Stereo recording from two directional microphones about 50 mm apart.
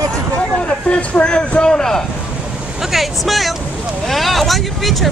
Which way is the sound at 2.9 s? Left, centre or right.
Centre.